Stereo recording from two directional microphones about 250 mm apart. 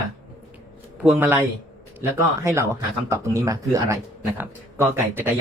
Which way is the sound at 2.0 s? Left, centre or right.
Centre.